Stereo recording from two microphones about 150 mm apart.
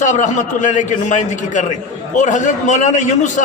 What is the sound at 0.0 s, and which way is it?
A man's voice, 55° left (ahead or behind).